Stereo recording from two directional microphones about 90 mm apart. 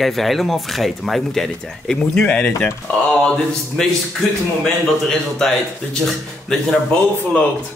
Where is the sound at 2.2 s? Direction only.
15° left (ahead or behind).